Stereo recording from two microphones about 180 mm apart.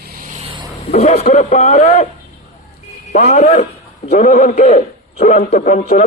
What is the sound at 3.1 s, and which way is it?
A man's voice, 45° left (ahead or behind).